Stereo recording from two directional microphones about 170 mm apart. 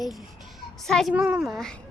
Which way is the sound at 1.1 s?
10° right (ahead or behind).